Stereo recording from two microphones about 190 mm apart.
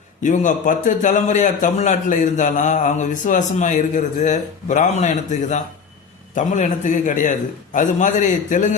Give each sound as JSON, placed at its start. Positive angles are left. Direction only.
{"t": 0.2, "sound": "a man's voice", "side_deg": 40}